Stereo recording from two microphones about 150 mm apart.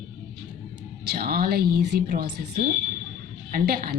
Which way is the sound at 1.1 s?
90° right.